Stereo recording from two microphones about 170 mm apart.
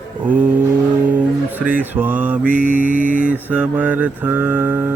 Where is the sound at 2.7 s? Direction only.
50° right (ahead or behind).